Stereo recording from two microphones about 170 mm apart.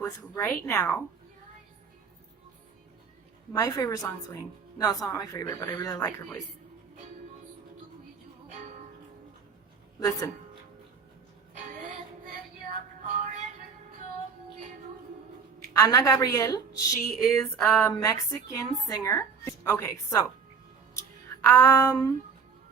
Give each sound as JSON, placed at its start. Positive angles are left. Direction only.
{"t": 0.0, "sound": "a woman's voice", "side_deg": 15}
{"t": 3.5, "sound": "a woman's voice", "side_deg": 20}
{"t": 10.0, "sound": "a woman's voice", "side_deg": 20}
{"t": 15.7, "sound": "a woman's voice", "side_deg": 20}
{"t": 21.4, "sound": "a woman's voice", "side_deg": 15}